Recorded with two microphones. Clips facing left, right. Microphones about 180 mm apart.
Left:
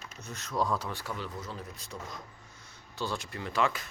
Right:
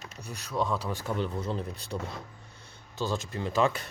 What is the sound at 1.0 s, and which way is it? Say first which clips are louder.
Speech: right 7 dB; 25° right (ahead or behind).